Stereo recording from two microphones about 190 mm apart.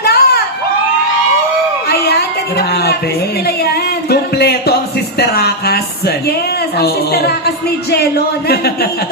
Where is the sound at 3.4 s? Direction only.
55° left (ahead or behind).